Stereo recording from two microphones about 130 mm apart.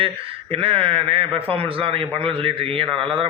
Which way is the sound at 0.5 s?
45° right (ahead or behind).